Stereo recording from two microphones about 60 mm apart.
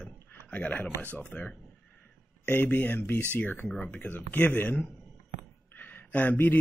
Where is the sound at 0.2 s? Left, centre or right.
Left.